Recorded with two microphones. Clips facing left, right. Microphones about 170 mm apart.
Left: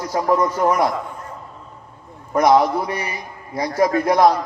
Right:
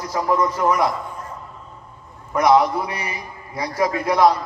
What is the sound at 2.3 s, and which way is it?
A man's voice, 45° left (ahead or behind).